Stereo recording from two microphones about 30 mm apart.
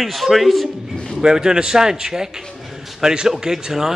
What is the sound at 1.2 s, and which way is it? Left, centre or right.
A man's voice, right.